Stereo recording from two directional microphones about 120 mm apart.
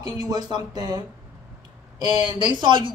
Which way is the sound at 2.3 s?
35° right (ahead or behind).